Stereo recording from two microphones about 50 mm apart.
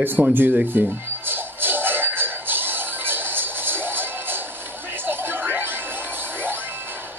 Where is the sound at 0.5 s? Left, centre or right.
Right.